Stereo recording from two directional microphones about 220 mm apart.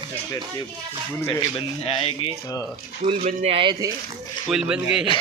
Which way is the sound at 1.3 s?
25° left (ahead or behind).